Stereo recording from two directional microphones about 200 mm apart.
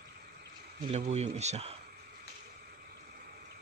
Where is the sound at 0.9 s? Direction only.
35° right (ahead or behind).